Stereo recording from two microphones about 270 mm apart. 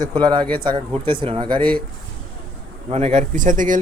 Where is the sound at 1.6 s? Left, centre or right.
Centre.